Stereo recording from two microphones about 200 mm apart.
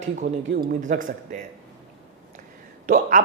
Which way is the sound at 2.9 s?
40° right (ahead or behind).